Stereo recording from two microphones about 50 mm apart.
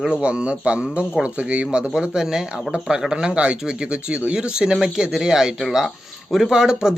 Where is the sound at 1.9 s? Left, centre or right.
Centre.